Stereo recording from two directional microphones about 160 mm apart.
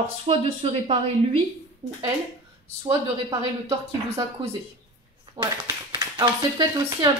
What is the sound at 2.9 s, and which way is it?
Speech, 20° right (ahead or behind).